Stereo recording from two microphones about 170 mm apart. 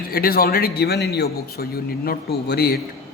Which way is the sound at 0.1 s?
60° left (ahead or behind).